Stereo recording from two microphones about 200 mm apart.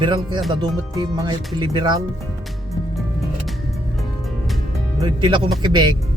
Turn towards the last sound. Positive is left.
turn(degrees=-20)  # may be behind; listen again after turning